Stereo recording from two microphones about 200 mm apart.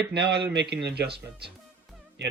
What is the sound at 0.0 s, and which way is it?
Speech, 55° right (ahead or behind).